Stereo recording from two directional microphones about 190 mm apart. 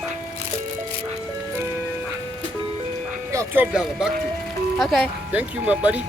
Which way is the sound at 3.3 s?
10° right (ahead or behind).